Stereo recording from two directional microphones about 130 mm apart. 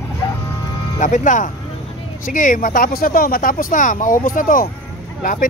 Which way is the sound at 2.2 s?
90° left.